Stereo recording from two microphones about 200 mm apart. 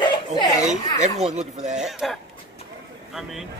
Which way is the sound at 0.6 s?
35° right (ahead or behind).